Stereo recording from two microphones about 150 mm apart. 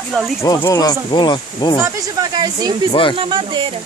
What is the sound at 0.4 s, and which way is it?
Speech, 25° left (ahead or behind).